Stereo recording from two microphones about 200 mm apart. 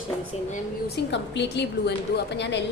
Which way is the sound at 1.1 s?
60° left (ahead or behind).